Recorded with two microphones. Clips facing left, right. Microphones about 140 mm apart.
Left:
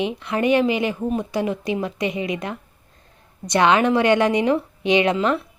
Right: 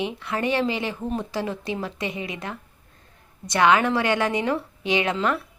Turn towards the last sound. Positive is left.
turn(degrees=20)  # may be behind; listen again after turning